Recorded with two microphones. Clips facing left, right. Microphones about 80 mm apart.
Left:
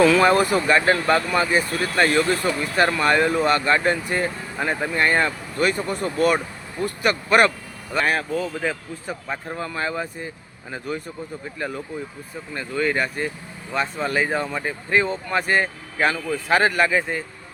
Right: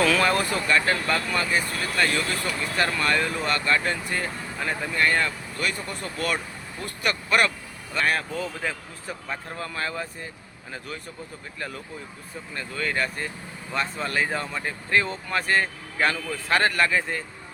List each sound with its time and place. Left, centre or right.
0.0 s speech: centre
7.9 s speech: centre